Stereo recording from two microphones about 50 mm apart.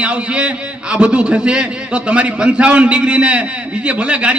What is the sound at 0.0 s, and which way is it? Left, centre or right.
A man's voice, right.